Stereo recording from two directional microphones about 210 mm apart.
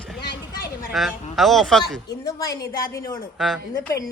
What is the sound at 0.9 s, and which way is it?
Speech, centre (ahead or behind).